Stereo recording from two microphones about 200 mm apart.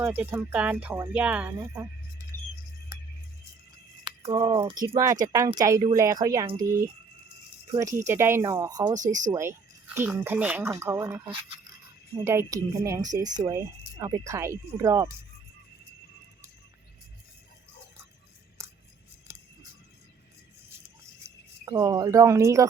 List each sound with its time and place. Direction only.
0.0 s speech: 10° right (ahead or behind)
4.0 s speech: 25° right (ahead or behind)
7.7 s speech: 15° right (ahead or behind)
18.6 s music: 15° right (ahead or behind)
19.3 s vehicle: 10° right (ahead or behind)
21.2 s speech: 15° right (ahead or behind)